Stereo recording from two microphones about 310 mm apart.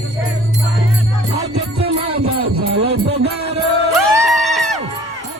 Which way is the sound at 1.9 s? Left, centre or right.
Centre.